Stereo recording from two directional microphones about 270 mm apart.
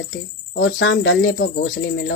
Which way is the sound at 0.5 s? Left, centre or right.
Left.